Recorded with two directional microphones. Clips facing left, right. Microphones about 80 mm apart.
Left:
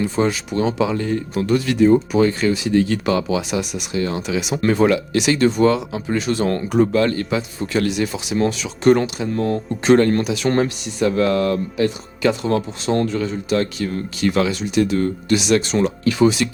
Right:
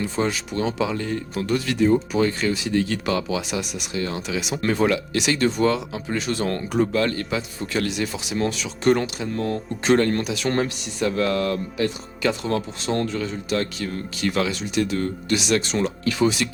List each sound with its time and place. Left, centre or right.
0.0 s speech: left